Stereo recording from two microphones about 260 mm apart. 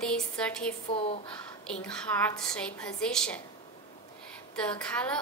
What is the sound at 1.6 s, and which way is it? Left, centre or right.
A woman's voice, centre.